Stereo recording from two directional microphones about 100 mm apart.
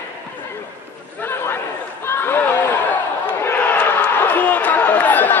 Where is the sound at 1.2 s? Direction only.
20° left (ahead or behind).